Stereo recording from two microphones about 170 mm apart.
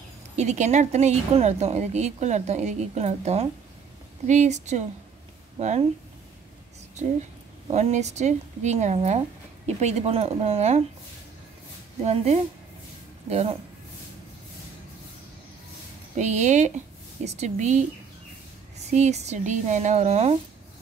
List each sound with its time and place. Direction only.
0.4 s a woman's voice: 40° right (ahead or behind)
7.7 s a woman's voice: 40° right (ahead or behind)
12.0 s a woman's voice: 40° right (ahead or behind)
16.2 s a woman's voice: 45° right (ahead or behind)
18.9 s a woman's voice: 40° right (ahead or behind)